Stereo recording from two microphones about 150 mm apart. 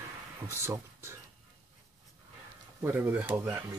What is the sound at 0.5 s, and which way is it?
Speech, 15° right (ahead or behind).